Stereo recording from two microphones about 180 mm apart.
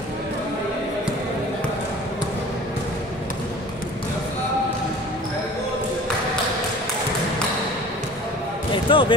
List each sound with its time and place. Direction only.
8.9 s speech: 30° left (ahead or behind)